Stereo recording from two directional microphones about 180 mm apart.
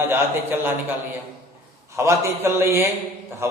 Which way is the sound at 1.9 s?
15° right (ahead or behind).